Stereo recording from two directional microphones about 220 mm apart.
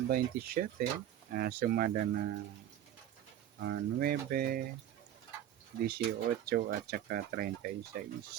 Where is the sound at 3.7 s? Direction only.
40° right (ahead or behind).